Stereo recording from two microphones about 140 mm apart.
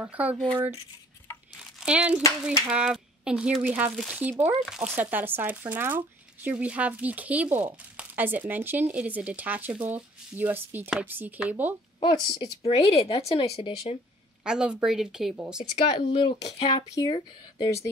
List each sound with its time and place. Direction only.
0.0 s speech: 10° right (ahead or behind)
1.8 s a woman's voice: 5° right (ahead or behind)
12.0 s a woman's voice: 35° left (ahead or behind); by 14.0 s 50° left (ahead or behind)
14.4 s a woman's voice: 5° right (ahead or behind)
15.9 s speech: 35° left (ahead or behind)